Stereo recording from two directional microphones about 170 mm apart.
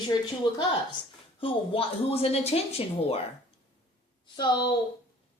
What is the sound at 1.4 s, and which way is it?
Speech, 35° left (ahead or behind).